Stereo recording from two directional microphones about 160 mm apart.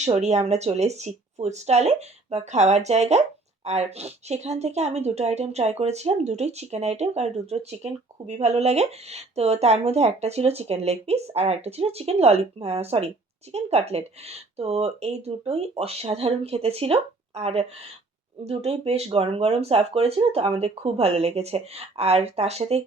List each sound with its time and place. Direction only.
0.0 s speech: 45° right (ahead or behind)